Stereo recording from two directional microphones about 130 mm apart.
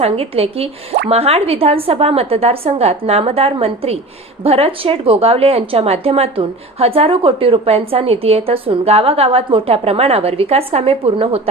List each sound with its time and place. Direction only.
0.0 s a woman's voice: 50° right (ahead or behind)